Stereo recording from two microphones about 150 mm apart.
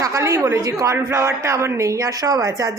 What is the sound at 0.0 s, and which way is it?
Speech, 20° right (ahead or behind).